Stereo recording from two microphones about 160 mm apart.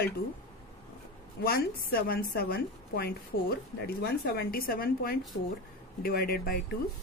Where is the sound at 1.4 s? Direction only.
70° left (ahead or behind).